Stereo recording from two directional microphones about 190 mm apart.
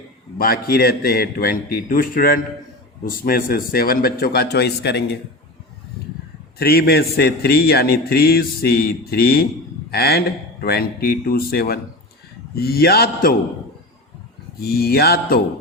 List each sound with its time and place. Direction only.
0.3 s a man's voice: 50° left (ahead or behind)
6.6 s a man's voice: 55° left (ahead or behind)
14.6 s a man's voice: 55° left (ahead or behind)